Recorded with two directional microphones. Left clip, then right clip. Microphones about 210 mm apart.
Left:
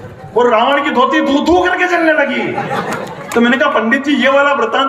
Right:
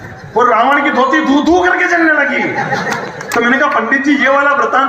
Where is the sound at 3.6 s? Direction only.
55° left (ahead or behind).